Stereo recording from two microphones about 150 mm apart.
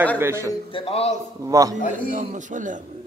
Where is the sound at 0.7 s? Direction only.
40° left (ahead or behind).